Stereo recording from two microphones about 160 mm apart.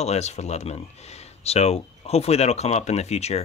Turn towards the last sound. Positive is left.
turn(degrees=40)  # may be behind; listen again after turning